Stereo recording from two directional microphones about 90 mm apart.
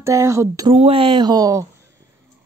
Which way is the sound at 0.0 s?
35° right (ahead or behind).